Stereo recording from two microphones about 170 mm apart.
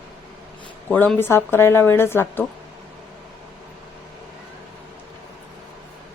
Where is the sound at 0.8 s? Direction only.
10° left (ahead or behind).